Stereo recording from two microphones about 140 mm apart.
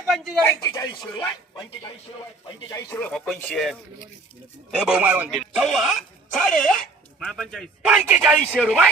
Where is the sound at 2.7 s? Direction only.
25° left (ahead or behind).